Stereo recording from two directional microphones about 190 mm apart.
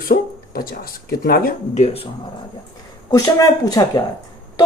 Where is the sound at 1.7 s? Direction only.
35° left (ahead or behind).